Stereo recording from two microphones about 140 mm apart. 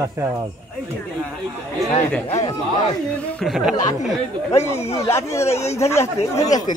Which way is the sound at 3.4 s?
Centre (ahead or behind).